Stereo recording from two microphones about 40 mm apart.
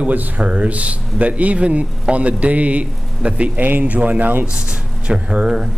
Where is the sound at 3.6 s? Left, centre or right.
Right.